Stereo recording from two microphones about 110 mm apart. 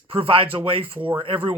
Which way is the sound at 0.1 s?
55° right (ahead or behind).